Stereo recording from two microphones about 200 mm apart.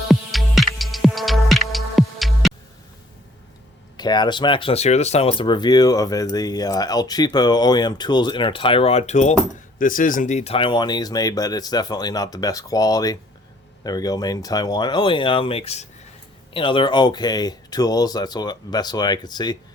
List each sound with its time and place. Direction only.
0.1 s music: centre (ahead or behind)
3.9 s speech: 20° left (ahead or behind)